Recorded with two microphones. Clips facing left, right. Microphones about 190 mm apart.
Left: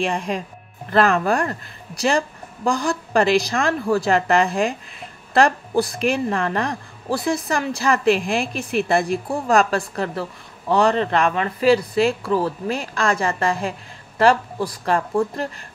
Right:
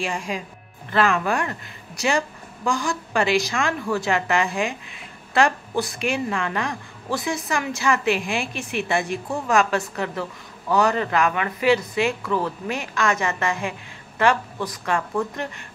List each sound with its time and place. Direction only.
0.1 s a woman's voice: 35° left (ahead or behind)